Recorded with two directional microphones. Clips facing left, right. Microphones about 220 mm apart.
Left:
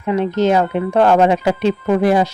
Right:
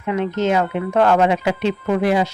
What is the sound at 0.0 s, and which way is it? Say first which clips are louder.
Speech: left 4 dB; 35° left (ahead or behind).